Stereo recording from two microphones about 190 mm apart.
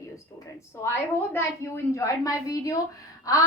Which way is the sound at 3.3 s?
20° left (ahead or behind).